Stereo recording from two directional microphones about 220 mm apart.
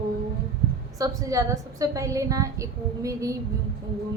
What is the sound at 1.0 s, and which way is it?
A woman's voice, 15° right (ahead or behind).